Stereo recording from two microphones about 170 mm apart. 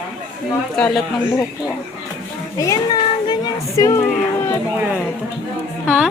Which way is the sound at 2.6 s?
20° left (ahead or behind).